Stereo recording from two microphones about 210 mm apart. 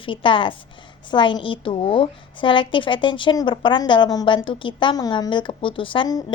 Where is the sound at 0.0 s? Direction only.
25° left (ahead or behind).